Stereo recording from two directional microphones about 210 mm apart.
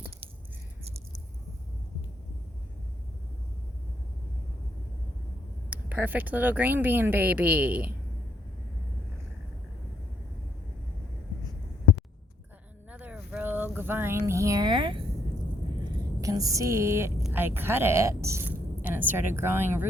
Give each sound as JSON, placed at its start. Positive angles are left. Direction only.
{"t": 5.7, "sound": "speech", "side_deg": -10}
{"t": 12.9, "sound": "a sound", "side_deg": -5}
{"t": 16.2, "sound": "speech", "side_deg": -15}